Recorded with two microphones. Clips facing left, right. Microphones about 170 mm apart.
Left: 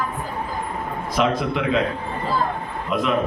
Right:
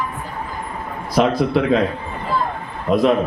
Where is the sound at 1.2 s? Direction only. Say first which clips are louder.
Right 5 dB; 35° right (ahead or behind).